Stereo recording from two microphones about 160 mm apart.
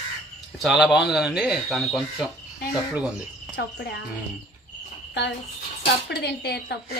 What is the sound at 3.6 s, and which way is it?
Speech, 90° left.